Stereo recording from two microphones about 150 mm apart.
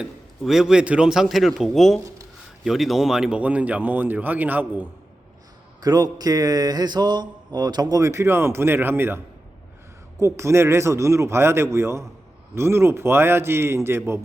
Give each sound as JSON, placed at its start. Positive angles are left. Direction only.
{"t": 0.0, "sound": "a man's voice", "side_deg": 0}
{"t": 5.8, "sound": "speech", "side_deg": -25}